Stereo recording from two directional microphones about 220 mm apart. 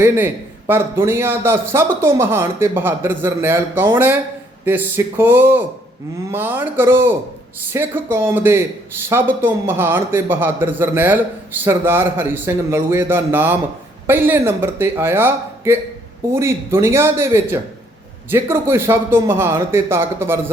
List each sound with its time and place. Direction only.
0.7 s a man's voice: 10° right (ahead or behind)